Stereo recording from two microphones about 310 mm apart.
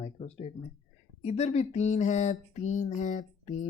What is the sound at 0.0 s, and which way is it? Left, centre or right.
Speech, left.